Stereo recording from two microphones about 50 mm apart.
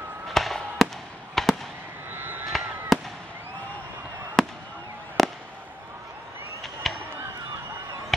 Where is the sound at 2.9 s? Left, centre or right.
Centre.